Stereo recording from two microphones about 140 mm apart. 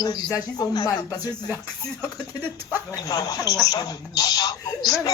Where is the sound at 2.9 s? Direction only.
30° left (ahead or behind).